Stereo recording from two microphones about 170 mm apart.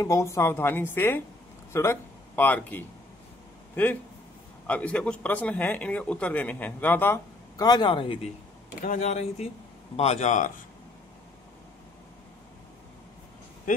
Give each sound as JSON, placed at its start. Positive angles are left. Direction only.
{"t": 0.0, "sound": "speech", "side_deg": 20}
{"t": 8.8, "sound": "speech", "side_deg": 45}